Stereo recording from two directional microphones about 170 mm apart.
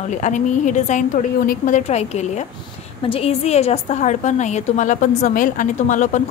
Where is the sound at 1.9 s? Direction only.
40° left (ahead or behind).